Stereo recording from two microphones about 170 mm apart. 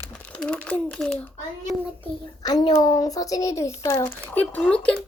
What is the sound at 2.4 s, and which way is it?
A child's voice, 25° left (ahead or behind).